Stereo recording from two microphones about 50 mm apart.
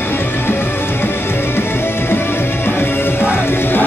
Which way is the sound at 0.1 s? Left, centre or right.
Left.